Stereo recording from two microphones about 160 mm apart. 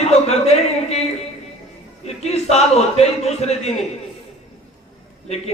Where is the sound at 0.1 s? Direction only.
40° left (ahead or behind).